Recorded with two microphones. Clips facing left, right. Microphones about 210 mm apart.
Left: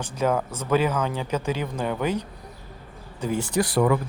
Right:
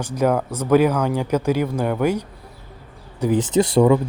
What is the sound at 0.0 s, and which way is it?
Speech, 15° right (ahead or behind).